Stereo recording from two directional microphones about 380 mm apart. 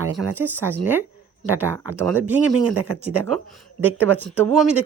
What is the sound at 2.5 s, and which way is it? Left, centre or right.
Speech, right.